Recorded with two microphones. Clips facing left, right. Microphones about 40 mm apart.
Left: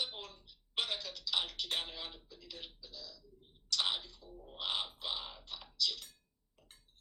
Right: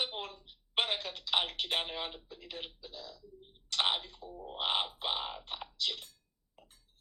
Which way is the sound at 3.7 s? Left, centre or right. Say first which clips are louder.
Right 4 dB; right.